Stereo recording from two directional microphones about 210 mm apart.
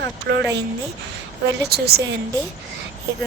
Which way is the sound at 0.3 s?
55° right (ahead or behind).